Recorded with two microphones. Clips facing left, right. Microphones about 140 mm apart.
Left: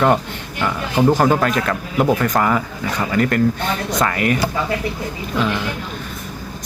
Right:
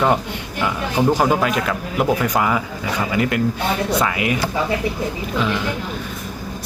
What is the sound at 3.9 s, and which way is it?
Speech, 10° right (ahead or behind).